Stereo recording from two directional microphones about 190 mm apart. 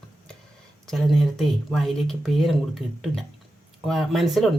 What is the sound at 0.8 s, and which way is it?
Speech, centre (ahead or behind).